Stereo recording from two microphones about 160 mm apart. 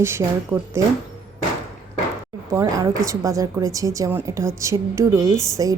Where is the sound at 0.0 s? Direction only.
15° right (ahead or behind).